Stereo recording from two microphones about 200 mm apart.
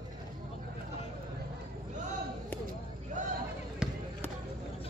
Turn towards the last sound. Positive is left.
turn(degrees=-5)  # may be behind; listen again after turning